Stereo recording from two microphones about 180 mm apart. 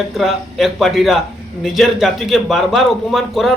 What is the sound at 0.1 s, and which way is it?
A man's voice, centre (ahead or behind).